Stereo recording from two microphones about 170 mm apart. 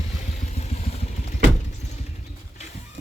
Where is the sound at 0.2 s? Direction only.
45° left (ahead or behind).